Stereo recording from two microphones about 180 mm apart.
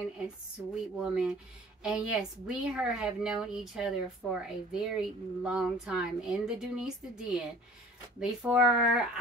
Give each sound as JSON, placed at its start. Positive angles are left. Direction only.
{"t": 0.9, "sound": "a woman's voice", "side_deg": -5}